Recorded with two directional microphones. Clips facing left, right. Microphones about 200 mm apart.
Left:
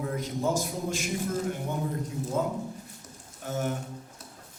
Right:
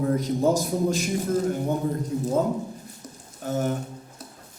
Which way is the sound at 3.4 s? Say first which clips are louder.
Right 5 dB; 35° right (ahead or behind).